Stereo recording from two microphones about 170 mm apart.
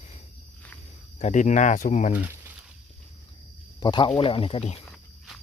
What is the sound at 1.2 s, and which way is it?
Speech, 45° left (ahead or behind).